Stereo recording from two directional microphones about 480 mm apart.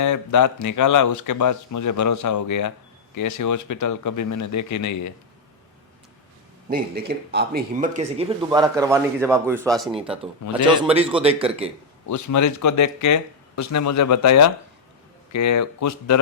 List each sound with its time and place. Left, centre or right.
0.0 s speech: left
6.7 s speech: centre
12.0 s speech: left